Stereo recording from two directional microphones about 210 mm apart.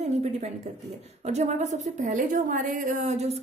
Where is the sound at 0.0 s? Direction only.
30° right (ahead or behind).